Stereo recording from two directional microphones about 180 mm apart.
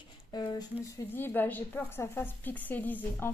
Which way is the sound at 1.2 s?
10° left (ahead or behind).